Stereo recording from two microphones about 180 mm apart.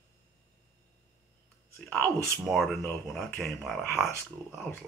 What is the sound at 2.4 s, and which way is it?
Speech, centre (ahead or behind).